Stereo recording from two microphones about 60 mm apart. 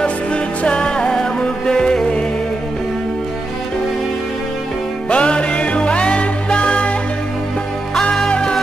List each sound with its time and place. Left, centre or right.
0.0 s music: centre
5.1 s music: centre
7.9 s music: centre